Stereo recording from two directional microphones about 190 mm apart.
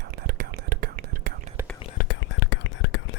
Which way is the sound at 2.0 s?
70° left (ahead or behind).